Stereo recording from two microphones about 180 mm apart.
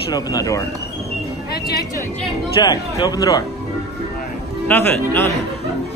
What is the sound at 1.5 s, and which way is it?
Speech, 60° left (ahead or behind).